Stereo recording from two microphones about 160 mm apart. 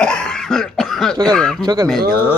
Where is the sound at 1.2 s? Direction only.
5° left (ahead or behind).